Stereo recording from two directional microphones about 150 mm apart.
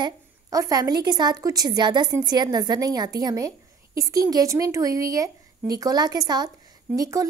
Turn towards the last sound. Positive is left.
turn(degrees=-25)  # may be behind; listen again after turning